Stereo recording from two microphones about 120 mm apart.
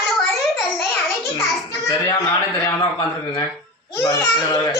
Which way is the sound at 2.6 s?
40° left (ahead or behind).